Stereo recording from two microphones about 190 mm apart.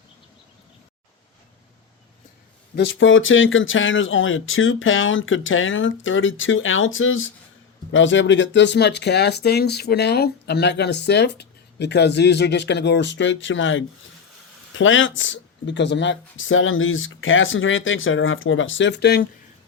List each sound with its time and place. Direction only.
2.7 s speech: 70° left (ahead or behind); by 7.3 s 90° left
7.9 s speech: 80° left; by 19.3 s 60° left (ahead or behind)